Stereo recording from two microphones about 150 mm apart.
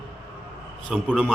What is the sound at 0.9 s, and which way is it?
Speech, 5° right (ahead or behind).